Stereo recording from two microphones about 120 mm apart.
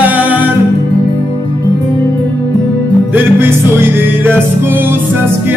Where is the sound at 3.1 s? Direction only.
20° right (ahead or behind).